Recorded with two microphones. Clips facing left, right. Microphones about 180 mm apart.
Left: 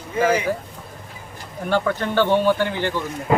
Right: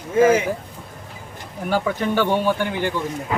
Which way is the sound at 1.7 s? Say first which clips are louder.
Even; 10° right (ahead or behind).